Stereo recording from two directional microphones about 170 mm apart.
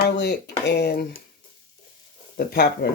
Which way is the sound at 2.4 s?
65° left (ahead or behind).